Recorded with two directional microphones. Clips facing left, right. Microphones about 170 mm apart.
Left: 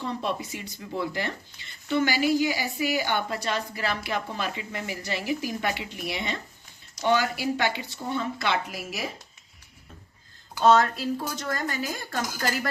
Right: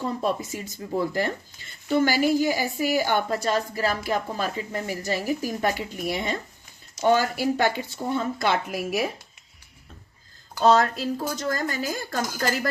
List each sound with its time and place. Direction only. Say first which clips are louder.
0.0 s speech: right 4 dB; 45° right (ahead or behind)
10.6 s a woman's voice: right 1 dB; 35° right (ahead or behind)